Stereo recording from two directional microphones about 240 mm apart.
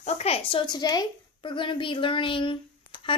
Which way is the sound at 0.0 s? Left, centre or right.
Left.